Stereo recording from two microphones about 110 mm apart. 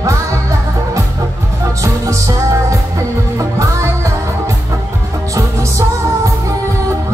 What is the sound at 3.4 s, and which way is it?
Music, 30° right (ahead or behind).